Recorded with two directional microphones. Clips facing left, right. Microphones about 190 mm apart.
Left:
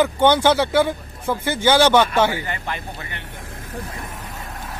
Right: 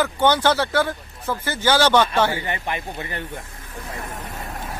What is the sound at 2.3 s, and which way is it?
Speech, 20° right (ahead or behind).